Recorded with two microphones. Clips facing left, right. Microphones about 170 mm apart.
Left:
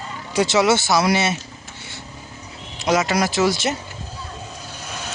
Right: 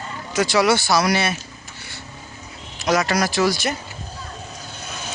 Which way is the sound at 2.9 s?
10° left (ahead or behind).